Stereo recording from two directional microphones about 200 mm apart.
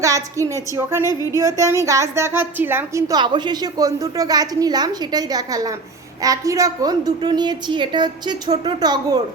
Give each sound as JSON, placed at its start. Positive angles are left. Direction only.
{"t": 0.0, "sound": "a woman's voice", "side_deg": -15}